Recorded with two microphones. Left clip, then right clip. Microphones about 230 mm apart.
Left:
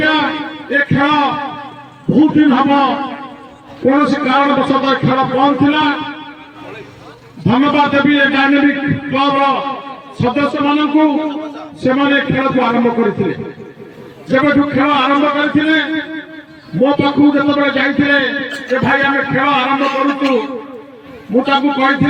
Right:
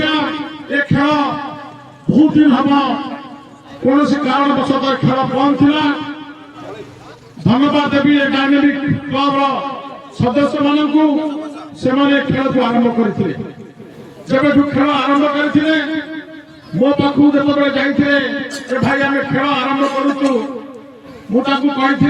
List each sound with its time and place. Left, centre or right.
0.0 s a sound: right
2.2 s a man's voice: right
7.4 s a man's voice: right
14.3 s a man's voice: right